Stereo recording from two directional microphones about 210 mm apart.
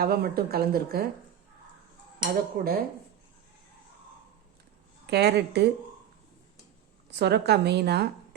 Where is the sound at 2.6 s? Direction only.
45° right (ahead or behind).